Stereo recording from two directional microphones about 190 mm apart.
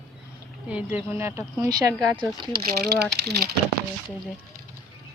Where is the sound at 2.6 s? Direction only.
55° right (ahead or behind).